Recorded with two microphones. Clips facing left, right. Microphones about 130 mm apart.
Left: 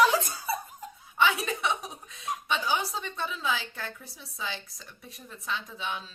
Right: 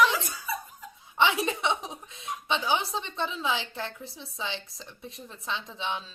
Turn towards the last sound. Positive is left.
turn(degrees=-25)  # may be behind; listen again after turning